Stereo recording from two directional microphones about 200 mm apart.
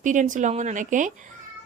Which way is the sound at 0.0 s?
40° right (ahead or behind).